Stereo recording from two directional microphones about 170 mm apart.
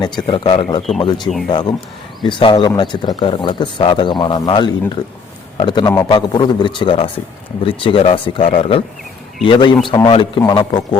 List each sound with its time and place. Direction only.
0.2 s speech: 30° left (ahead or behind)